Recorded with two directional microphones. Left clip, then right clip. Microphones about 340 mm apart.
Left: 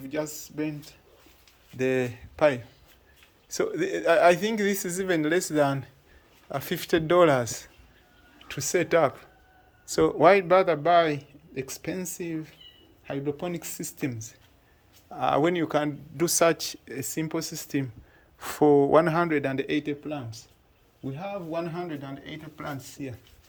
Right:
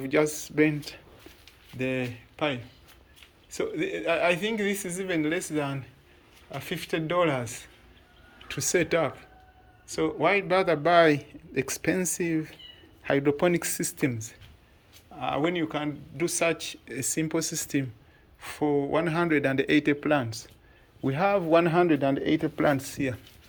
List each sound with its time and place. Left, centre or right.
0.0 s a man's voice: centre
1.8 s a man's voice: centre
15.1 s speech: centre
18.3 s a man's voice: centre
23.0 s a man's voice: centre